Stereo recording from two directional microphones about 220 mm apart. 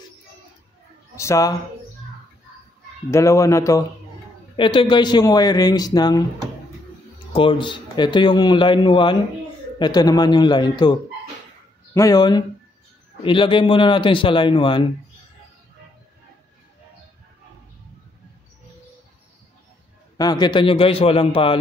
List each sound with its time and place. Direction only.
1.1 s a man's voice: 15° left (ahead or behind)
3.1 s a man's voice: 15° left (ahead or behind)
7.3 s a man's voice: 25° left (ahead or behind)
20.2 s a man's voice: 20° left (ahead or behind)